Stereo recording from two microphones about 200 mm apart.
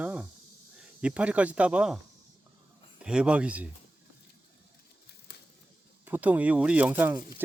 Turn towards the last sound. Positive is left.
turn(degrees=-10)  # may be behind; listen again after turning